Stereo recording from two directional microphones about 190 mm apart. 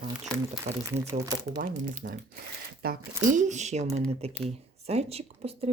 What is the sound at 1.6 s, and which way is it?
Speech, 45° right (ahead or behind).